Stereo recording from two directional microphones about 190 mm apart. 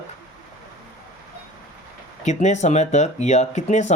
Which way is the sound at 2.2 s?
35° left (ahead or behind).